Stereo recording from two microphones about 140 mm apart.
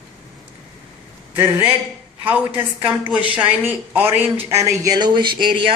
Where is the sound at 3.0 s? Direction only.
10° right (ahead or behind).